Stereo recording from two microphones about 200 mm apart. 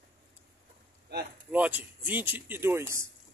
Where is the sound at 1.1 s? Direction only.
55° right (ahead or behind).